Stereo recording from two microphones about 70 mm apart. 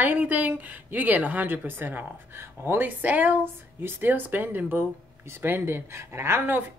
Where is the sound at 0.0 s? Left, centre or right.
Right.